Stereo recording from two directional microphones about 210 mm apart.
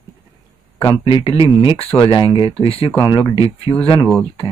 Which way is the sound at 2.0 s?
25° left (ahead or behind).